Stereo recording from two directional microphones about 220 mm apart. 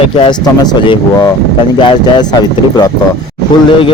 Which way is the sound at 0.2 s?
20° left (ahead or behind).